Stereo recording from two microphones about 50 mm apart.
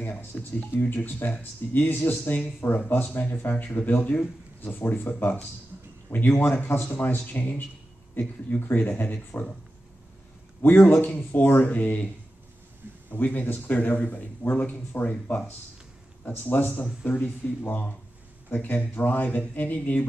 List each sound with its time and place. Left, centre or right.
0.0 s speech: left
0.4 s a man's voice: left
10.6 s a man's voice: left
11.6 s speech: left
13.1 s a man's voice: left